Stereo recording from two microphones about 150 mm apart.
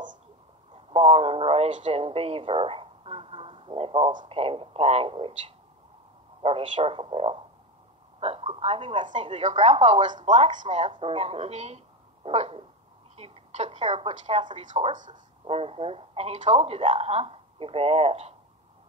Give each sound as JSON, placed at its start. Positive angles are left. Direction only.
{"t": 0.7, "sound": "a woman's voice", "side_deg": -40}
{"t": 6.4, "sound": "a woman's voice", "side_deg": -40}
{"t": 9.4, "sound": "speech", "side_deg": -50}
{"t": 10.5, "sound": "speech", "side_deg": -55}
{"t": 10.8, "sound": "a woman's voice", "side_deg": -35}